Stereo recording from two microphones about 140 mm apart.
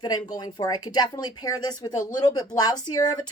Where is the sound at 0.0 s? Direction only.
30° left (ahead or behind).